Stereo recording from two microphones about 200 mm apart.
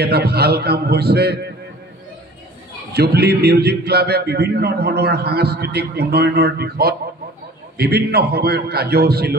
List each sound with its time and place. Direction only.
0.0 s speech: 55° right (ahead or behind)
2.9 s speech: 55° right (ahead or behind)